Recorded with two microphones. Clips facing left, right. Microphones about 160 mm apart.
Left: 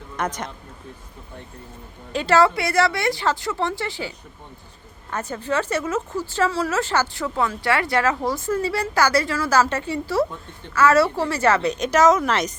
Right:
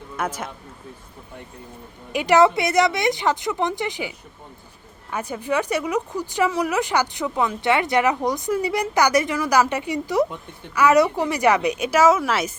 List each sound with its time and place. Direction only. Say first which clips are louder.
0.2 s speech: even; 5° right (ahead or behind)
2.1 s speech: right 2 dB; 15° right (ahead or behind)
5.1 s speech: right 1 dB; 10° right (ahead or behind)